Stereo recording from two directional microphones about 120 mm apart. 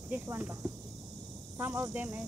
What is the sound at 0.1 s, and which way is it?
Speech, 15° right (ahead or behind).